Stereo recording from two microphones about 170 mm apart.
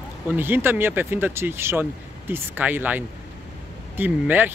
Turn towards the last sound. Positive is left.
turn(degrees=-10)  # may be behind; listen again after turning